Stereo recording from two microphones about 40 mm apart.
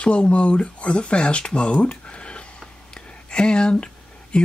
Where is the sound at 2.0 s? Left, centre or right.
Left.